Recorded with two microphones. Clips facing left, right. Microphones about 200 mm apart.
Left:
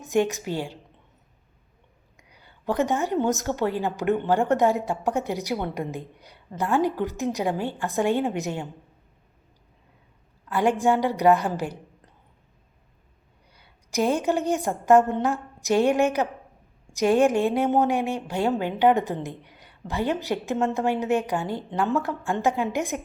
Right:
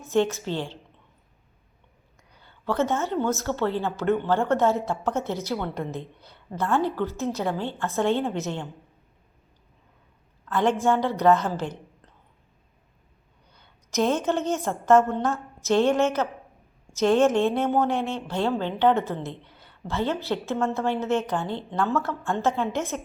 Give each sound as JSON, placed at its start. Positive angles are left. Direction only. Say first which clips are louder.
{"t": 0.0, "sound": "speech", "louder": "even", "side_deg": 15}
{"t": 2.1, "sound": "a woman's voice", "louder": "left 1 dB", "side_deg": 15}
{"t": 10.5, "sound": "speech", "louder": "left 1 dB", "side_deg": 10}
{"t": 13.5, "sound": "a woman's voice", "louder": "even", "side_deg": 10}